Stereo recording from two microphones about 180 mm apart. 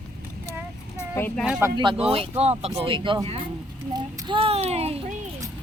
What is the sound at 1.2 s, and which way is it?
Speech, 10° left (ahead or behind).